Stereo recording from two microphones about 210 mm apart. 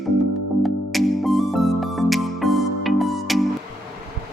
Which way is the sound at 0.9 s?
Centre (ahead or behind).